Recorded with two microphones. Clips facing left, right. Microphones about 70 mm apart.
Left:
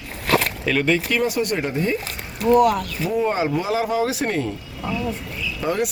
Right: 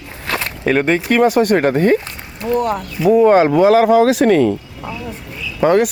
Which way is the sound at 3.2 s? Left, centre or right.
Right.